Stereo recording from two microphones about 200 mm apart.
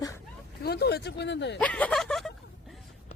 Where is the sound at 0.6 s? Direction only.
50° left (ahead or behind).